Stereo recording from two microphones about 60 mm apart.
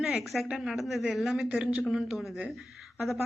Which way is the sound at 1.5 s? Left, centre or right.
Centre.